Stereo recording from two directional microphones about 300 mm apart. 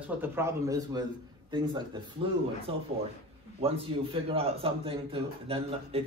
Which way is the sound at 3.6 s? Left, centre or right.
Centre.